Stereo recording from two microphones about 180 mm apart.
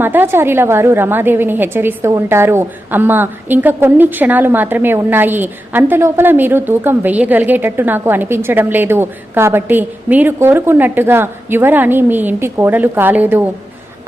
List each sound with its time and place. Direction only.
0.0 s a woman's voice: 10° right (ahead or behind)